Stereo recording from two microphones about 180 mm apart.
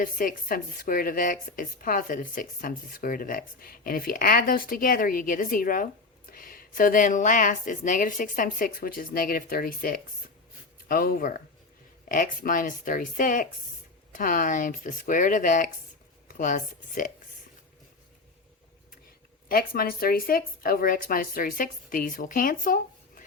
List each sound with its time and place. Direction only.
0.0 s a woman's voice: 50° left (ahead or behind)
19.5 s a woman's voice: 55° left (ahead or behind)